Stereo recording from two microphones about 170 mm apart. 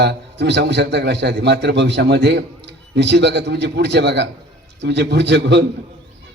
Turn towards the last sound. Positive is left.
turn(degrees=-90)